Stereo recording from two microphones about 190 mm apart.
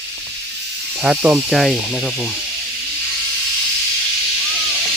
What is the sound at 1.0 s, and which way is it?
Speech, 5° right (ahead or behind).